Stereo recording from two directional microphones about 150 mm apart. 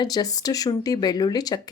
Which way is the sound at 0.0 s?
25° left (ahead or behind).